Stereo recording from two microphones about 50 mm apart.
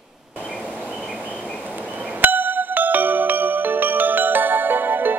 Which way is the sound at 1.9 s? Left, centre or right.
Right.